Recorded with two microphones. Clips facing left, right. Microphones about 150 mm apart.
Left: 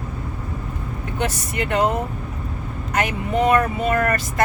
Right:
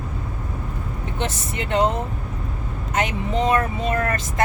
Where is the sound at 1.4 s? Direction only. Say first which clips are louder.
Right 1 dB; 25° right (ahead or behind).